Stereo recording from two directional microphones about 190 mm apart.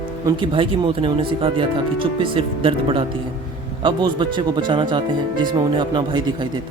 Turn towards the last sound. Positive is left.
turn(degrees=-25)  # may be behind; listen again after turning